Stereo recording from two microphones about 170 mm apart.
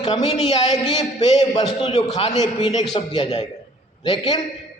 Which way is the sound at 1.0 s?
25° left (ahead or behind).